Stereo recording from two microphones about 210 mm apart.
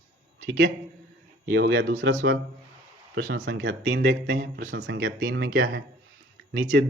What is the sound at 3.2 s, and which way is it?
Speech, 55° right (ahead or behind).